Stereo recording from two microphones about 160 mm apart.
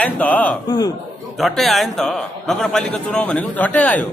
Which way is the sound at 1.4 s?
Centre (ahead or behind).